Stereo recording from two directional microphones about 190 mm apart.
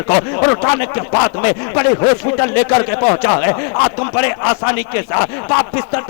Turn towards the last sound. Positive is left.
turn(degrees=20)  # may be behind; listen again after turning